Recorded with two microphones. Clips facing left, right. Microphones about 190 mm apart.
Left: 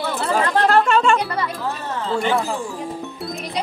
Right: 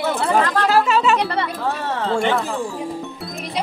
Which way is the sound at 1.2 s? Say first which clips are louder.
Right 2 dB; 30° right (ahead or behind).